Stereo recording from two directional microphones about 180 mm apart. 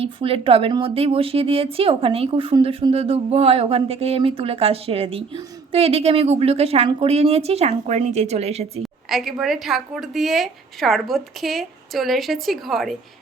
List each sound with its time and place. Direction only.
0.0 s a woman's voice: 30° right (ahead or behind)
8.8 s a woman's voice: centre (ahead or behind)